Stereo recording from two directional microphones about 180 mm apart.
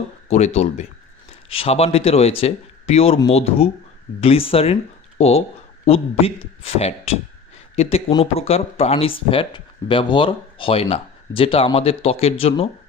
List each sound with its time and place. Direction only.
0.3 s speech: 35° left (ahead or behind)